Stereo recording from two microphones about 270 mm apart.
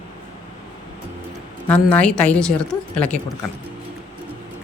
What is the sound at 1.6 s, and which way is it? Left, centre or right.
A woman's voice, centre.